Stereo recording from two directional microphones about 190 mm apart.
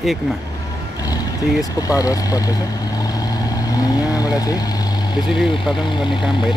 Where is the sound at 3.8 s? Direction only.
20° left (ahead or behind).